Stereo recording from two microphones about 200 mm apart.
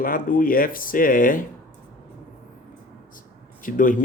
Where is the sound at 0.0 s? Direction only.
45° left (ahead or behind).